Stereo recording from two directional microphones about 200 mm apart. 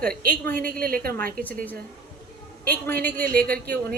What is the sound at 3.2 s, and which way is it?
Speech, 50° right (ahead or behind).